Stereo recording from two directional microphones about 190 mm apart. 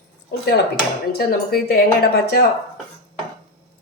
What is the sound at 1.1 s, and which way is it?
Speech, 50° left (ahead or behind).